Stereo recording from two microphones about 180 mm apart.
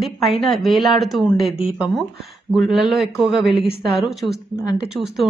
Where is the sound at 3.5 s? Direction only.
30° left (ahead or behind).